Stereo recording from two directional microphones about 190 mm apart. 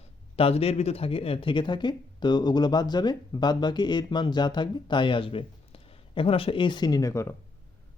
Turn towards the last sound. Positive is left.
turn(degrees=15)  # may be behind; listen again after turning